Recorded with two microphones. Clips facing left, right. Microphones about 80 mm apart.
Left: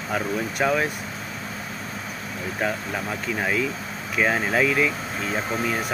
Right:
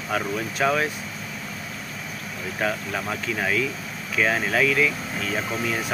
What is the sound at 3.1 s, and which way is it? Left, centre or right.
Speech, centre.